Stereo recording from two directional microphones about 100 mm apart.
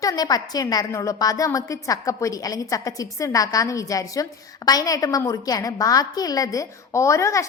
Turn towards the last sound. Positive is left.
turn(degrees=30)  # may be behind; listen again after turning